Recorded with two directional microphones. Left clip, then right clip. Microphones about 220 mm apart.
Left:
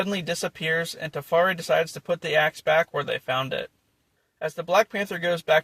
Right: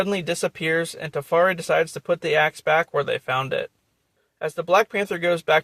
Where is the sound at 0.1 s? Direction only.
20° right (ahead or behind).